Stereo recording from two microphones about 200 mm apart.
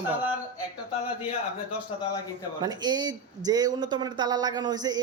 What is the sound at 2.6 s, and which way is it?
Speech, 20° right (ahead or behind).